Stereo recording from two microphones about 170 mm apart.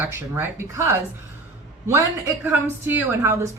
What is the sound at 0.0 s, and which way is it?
Speech, 15° right (ahead or behind).